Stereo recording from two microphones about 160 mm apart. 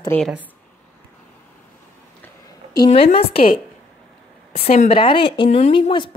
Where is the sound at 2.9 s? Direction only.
35° left (ahead or behind).